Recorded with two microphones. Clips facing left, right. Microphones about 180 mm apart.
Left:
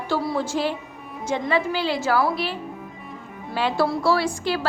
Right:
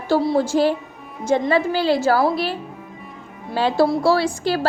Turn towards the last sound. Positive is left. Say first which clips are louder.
# right 3 dB
turn(degrees=-35)  # may be behind; listen again after turning